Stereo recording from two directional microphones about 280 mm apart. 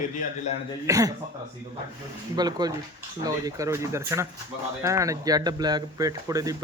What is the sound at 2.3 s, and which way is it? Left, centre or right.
A man's voice, centre.